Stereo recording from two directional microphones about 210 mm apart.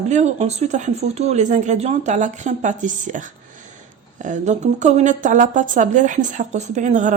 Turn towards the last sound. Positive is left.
turn(degrees=-35)  # may be behind; listen again after turning